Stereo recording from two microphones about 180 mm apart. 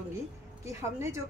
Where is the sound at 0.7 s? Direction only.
15° right (ahead or behind).